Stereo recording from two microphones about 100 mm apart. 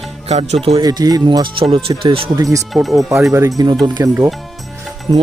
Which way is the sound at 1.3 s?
55° right (ahead or behind).